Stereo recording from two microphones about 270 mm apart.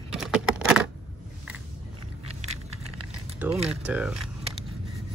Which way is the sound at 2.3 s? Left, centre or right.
Right.